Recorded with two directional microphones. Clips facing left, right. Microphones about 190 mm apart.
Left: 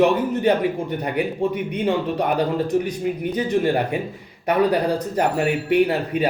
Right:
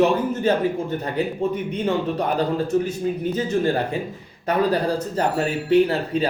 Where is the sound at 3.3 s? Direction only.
15° left (ahead or behind).